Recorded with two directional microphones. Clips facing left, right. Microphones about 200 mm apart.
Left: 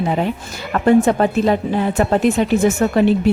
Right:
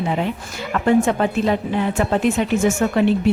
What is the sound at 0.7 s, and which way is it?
A woman's voice, 40° left (ahead or behind).